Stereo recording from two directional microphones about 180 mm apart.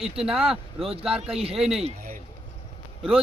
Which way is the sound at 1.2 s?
35° right (ahead or behind).